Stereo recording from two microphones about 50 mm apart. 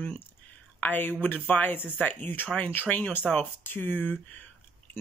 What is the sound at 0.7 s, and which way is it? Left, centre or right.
Speech, left.